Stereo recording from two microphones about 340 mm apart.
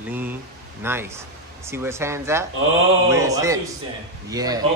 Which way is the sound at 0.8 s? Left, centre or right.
Centre.